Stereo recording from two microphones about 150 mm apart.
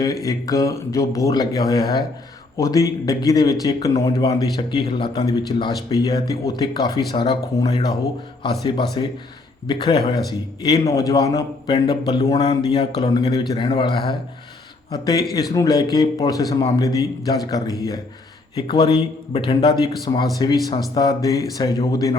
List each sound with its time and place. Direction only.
0.0 s a man's voice: 20° left (ahead or behind)